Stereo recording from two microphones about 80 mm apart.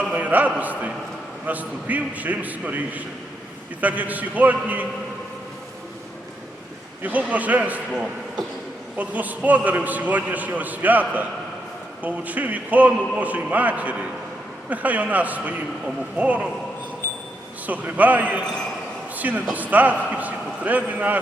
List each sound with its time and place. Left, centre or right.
0.1 s a man's voice: right
7.0 s a man's voice: centre
9.0 s a man's voice: right
17.7 s a man's voice: centre
19.1 s a sound: right
19.7 s a man's voice: centre